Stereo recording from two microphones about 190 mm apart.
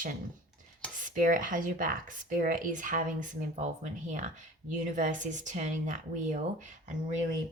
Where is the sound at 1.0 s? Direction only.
45° right (ahead or behind).